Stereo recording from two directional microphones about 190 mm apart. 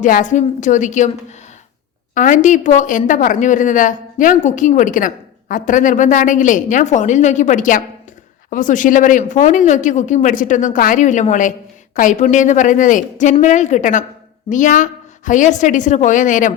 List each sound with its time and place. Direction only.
0.0 s a woman's voice: 40° left (ahead or behind)
2.1 s a woman's voice: 40° left (ahead or behind)